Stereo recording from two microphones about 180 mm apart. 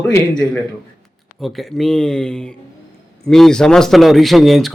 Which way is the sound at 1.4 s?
Centre (ahead or behind).